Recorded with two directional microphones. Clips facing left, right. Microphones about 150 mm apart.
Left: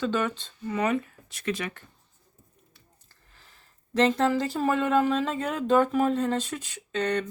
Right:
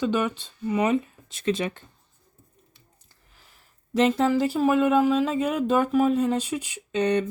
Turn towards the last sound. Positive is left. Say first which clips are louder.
# right 4 dB
turn(degrees=-15)  # may be behind; listen again after turning